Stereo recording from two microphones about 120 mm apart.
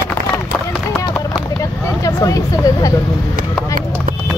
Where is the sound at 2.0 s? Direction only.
30° left (ahead or behind).